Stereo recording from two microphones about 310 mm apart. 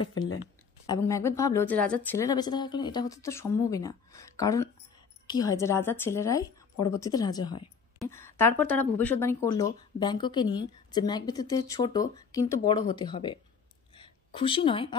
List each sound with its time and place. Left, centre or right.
0.1 s speech: left
0.8 s a woman's voice: centre
13.9 s a sound: centre